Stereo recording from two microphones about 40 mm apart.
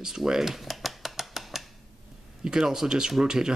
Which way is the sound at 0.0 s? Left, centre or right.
Centre.